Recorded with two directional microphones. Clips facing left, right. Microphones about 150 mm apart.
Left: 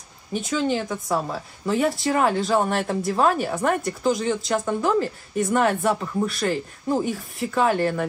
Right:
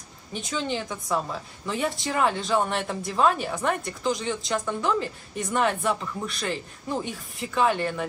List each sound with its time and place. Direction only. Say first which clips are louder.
0.5 s a woman's voice: left 6 dB; 45° left (ahead or behind)
0.8 s a woman's voice: left 3 dB; 30° left (ahead or behind)